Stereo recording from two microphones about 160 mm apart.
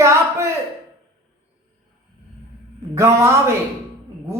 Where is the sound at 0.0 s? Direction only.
15° right (ahead or behind).